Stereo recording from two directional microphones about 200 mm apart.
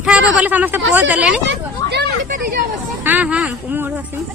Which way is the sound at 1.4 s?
60° right (ahead or behind).